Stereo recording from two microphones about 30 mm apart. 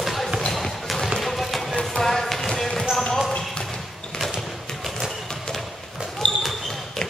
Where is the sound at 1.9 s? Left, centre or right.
Centre.